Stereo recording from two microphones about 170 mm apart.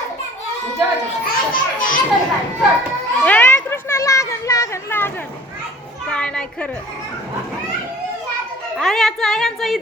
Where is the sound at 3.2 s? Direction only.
10° left (ahead or behind).